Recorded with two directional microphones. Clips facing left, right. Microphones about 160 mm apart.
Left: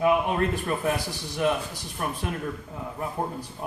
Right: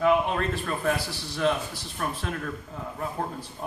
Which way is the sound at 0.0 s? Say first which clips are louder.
Even; 15° left (ahead or behind).